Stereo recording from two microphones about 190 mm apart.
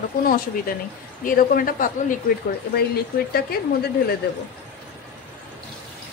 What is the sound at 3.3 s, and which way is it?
Speech, 55° left (ahead or behind).